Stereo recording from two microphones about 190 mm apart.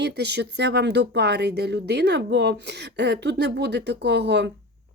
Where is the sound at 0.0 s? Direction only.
65° right (ahead or behind).